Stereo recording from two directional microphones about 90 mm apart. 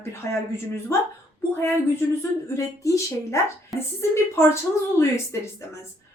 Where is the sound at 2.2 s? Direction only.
35° left (ahead or behind).